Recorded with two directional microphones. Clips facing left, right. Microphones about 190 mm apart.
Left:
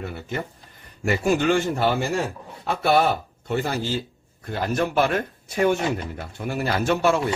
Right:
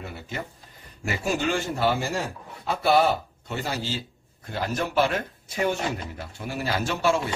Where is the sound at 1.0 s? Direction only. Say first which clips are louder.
Left 6 dB; 55° left (ahead or behind).